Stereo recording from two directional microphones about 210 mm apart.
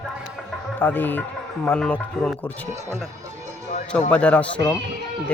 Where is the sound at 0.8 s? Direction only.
10° left (ahead or behind).